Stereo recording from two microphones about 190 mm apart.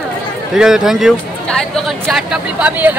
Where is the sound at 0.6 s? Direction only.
5° right (ahead or behind).